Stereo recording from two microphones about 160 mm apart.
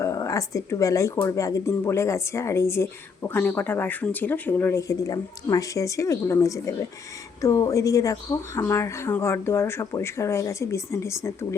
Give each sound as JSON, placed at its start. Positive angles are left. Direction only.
{"t": 0.0, "sound": "speech", "side_deg": 20}